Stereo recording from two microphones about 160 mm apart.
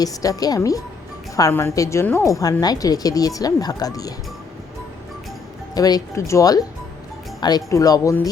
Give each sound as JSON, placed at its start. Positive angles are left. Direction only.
{"t": 0.0, "sound": "a woman's voice", "side_deg": 20}
{"t": 5.7, "sound": "a woman's voice", "side_deg": 25}